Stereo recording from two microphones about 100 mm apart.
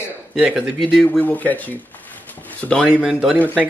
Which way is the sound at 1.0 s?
15° left (ahead or behind).